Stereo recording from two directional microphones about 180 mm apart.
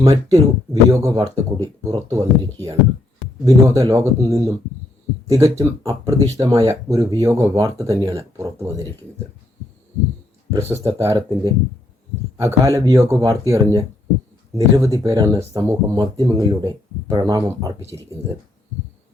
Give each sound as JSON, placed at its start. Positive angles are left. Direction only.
{"t": 0.0, "sound": "speech", "side_deg": -20}
{"t": 3.4, "sound": "speech", "side_deg": -20}
{"t": 10.5, "sound": "speech", "side_deg": -15}